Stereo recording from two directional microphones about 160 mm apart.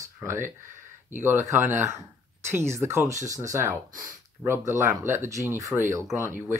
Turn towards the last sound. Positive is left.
turn(degrees=-15)  # may be behind; listen again after turning